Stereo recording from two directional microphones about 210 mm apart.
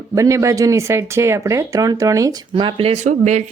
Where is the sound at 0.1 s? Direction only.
15° right (ahead or behind).